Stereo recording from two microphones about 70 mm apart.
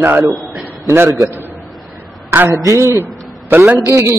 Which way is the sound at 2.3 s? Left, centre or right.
Right.